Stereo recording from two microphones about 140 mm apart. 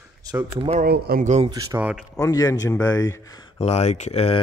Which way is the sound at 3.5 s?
50° left (ahead or behind).